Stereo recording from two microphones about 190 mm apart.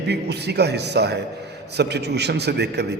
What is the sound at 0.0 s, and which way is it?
A man's voice, 60° right (ahead or behind).